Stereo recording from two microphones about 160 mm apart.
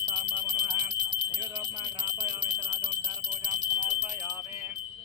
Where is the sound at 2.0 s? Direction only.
25° right (ahead or behind).